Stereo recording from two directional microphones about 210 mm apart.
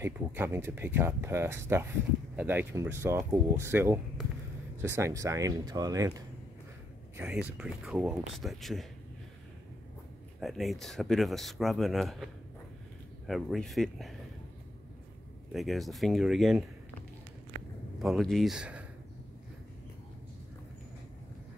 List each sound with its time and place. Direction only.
0.0 s speech: 10° right (ahead or behind)
7.2 s speech: 5° right (ahead or behind)
10.4 s speech: centre (ahead or behind)
13.3 s speech: centre (ahead or behind)
15.5 s speech: centre (ahead or behind)
18.0 s speech: centre (ahead or behind)